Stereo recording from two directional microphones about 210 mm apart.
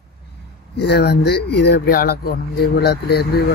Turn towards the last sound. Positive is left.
turn(degrees=50)  # may be behind; listen again after turning